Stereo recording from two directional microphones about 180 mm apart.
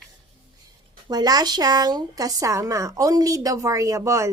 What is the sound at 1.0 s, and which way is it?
Speech, 20° right (ahead or behind).